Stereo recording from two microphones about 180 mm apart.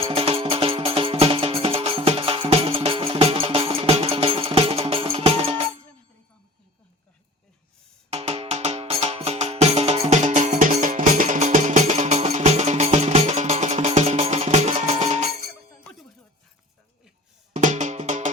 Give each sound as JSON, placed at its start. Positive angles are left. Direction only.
{"t": 0.0, "sound": "music", "side_deg": -30}
{"t": 8.1, "sound": "music", "side_deg": -35}
{"t": 17.5, "sound": "music", "side_deg": -40}